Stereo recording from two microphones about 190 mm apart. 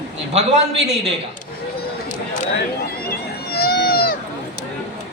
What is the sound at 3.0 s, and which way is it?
Run, 55° left (ahead or behind).